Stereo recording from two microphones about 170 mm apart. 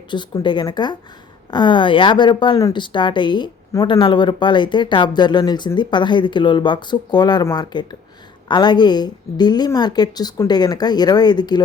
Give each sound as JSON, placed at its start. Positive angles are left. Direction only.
{"t": 0.1, "sound": "speech", "side_deg": 25}